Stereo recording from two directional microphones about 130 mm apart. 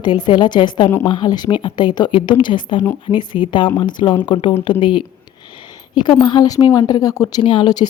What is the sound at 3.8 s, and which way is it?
Speech, 35° left (ahead or behind).